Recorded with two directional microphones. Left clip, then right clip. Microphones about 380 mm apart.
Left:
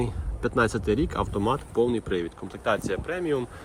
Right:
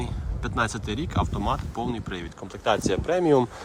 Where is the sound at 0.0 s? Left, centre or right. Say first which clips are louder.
Left 5 dB; centre.